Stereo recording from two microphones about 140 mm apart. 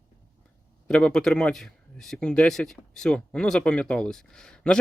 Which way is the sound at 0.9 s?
5° left (ahead or behind).